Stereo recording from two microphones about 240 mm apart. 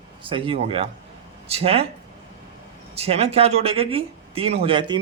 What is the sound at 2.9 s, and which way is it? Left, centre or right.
Speech, right.